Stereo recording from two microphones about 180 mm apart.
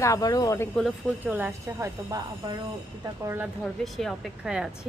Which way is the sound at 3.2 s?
10° right (ahead or behind).